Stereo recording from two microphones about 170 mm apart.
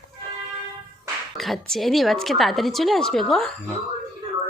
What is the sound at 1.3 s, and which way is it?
A woman's voice, centre (ahead or behind).